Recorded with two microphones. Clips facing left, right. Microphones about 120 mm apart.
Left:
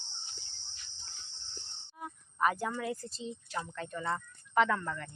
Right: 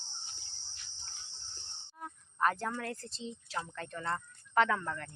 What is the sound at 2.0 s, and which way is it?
Speech, 5° left (ahead or behind).